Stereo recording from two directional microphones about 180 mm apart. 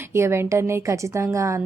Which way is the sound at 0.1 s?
15° right (ahead or behind).